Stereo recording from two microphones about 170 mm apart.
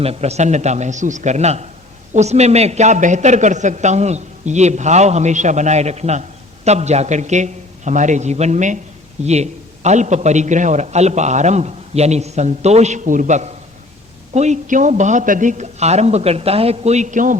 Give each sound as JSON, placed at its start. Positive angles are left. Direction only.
{"t": 0.0, "sound": "a man's voice", "side_deg": -35}